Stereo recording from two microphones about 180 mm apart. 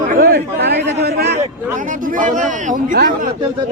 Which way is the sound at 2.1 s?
45° right (ahead or behind).